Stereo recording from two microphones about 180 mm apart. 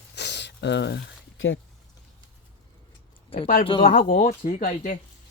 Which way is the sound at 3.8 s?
50° left (ahead or behind).